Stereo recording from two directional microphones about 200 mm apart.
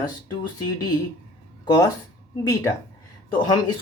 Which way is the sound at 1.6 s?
20° left (ahead or behind).